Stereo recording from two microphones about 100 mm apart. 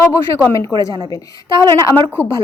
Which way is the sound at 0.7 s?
10° right (ahead or behind).